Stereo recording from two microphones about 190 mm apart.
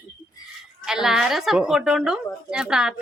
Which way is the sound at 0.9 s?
Centre (ahead or behind).